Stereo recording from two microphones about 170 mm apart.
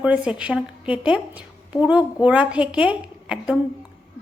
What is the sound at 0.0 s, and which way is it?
A woman's voice, 5° right (ahead or behind).